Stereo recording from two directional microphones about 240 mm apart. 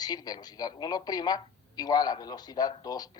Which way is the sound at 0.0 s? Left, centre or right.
Centre.